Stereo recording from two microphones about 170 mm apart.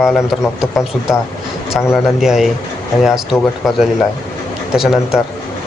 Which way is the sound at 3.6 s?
Centre (ahead or behind).